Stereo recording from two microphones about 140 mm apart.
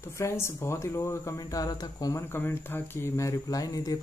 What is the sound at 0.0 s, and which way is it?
Speech, 20° left (ahead or behind).